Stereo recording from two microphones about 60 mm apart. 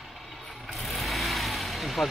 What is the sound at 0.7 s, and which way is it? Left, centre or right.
Vehicle, centre.